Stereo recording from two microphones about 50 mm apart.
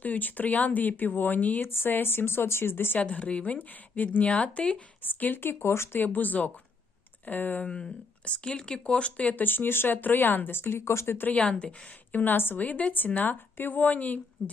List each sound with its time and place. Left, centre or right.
0.0 s speech: left
1.6 s speech: left
3.0 s a woman's voice: left
5.0 s speech: left
6.0 s speech: left
7.6 s a woman's voice: left
11.3 s a woman's voice: left
12.1 s speech: left
12.5 s speech: left